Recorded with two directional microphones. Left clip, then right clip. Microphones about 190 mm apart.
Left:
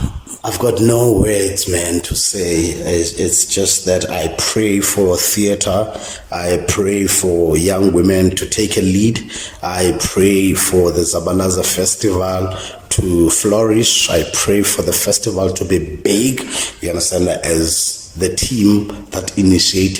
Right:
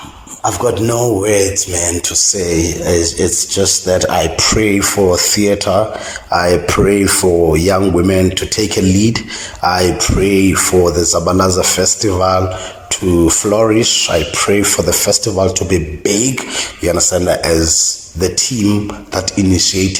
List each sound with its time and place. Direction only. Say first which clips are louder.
0.4 s speech: even; 25° left (ahead or behind)
0.9 s speech: right 1 dB; 20° left (ahead or behind)
7.3 s speech: right 3 dB; centre (ahead or behind)
7.5 s speech: right 1 dB; 20° left (ahead or behind)